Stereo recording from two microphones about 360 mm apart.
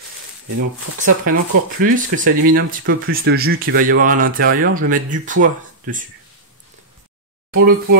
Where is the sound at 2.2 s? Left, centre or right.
Right.